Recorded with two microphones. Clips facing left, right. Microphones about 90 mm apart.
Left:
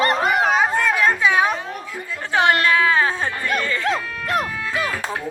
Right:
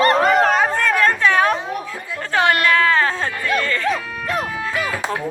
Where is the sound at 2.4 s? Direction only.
20° left (ahead or behind).